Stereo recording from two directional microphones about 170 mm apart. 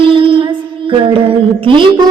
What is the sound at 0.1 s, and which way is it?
Child singing, 30° right (ahead or behind).